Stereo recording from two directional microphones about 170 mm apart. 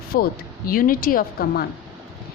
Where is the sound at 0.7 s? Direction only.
55° left (ahead or behind).